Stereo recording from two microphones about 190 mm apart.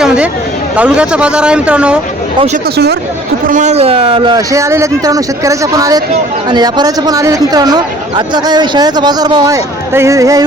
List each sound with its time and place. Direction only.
0.8 s speech: 5° right (ahead or behind)
3.4 s speech: 40° right (ahead or behind); by 10.4 s 15° right (ahead or behind)